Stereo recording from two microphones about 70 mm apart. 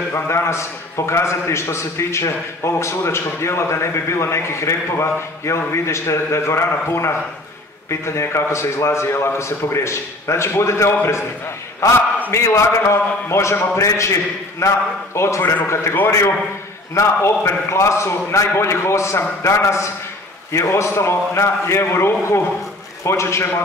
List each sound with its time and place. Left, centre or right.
0.1 s a man's voice: left